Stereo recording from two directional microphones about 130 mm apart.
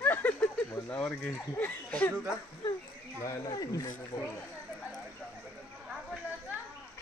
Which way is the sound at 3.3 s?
30° left (ahead or behind).